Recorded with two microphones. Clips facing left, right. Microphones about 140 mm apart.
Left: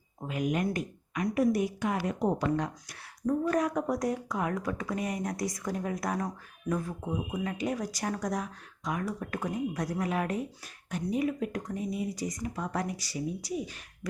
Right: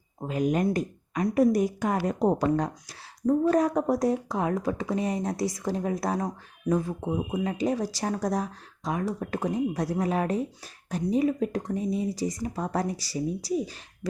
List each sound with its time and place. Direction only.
0.2 s speech: 35° right (ahead or behind)